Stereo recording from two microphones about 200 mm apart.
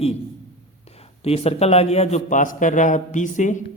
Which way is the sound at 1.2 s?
30° left (ahead or behind).